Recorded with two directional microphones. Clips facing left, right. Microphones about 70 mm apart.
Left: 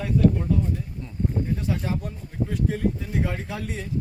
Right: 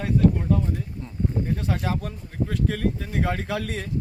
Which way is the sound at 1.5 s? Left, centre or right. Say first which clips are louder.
Right 1 dB; right.